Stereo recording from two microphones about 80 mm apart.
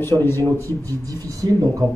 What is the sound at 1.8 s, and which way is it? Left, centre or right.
Speech, right.